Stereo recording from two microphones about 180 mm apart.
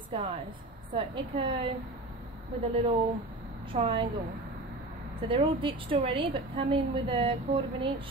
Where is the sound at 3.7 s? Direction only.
30° right (ahead or behind).